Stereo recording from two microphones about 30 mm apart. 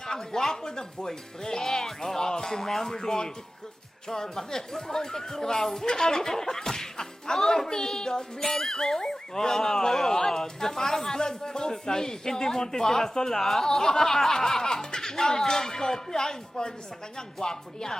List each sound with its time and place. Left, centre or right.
0.0 s speech: centre
10.2 s speech: centre
13.4 s speech: centre
13.7 s speech: centre